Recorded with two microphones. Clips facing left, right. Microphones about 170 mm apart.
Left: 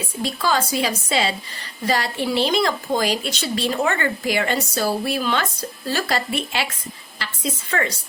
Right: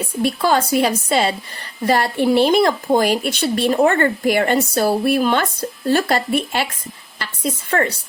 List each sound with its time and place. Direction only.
0.2 s speech: 55° right (ahead or behind)